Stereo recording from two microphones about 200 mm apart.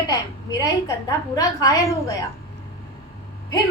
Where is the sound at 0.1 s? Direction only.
20° left (ahead or behind).